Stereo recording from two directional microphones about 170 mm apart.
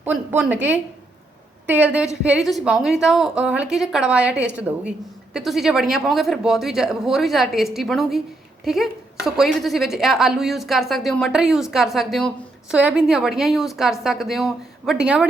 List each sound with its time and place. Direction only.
0.0 s a woman's voice: 10° right (ahead or behind)
4.4 s a woman's voice: 90° right
4.6 s a woman's voice: 5° right (ahead or behind)